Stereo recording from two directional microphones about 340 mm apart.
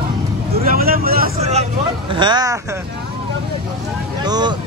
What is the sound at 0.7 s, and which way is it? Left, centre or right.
Speech, right.